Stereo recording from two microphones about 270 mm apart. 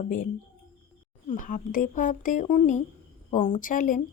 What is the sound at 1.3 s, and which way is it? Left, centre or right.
Speech, left.